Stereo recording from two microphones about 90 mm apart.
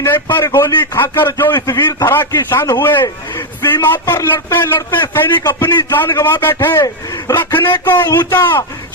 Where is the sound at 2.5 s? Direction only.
25° left (ahead or behind).